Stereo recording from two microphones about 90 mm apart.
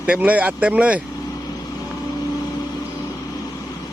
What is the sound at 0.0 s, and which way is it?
Speech, 15° right (ahead or behind).